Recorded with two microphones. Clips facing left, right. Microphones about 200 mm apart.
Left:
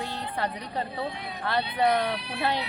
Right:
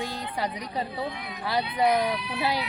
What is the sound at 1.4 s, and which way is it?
Speech, 10° right (ahead or behind).